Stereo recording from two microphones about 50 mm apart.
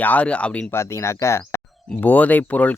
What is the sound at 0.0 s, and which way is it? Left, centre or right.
Speech, left.